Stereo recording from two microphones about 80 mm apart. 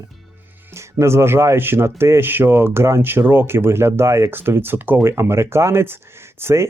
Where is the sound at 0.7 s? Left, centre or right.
Right.